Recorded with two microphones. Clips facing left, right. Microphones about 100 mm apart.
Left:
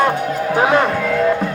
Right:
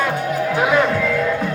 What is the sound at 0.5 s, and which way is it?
Music, 35° left (ahead or behind).